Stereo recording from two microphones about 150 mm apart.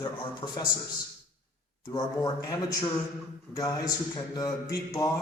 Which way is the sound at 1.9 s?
25° left (ahead or behind).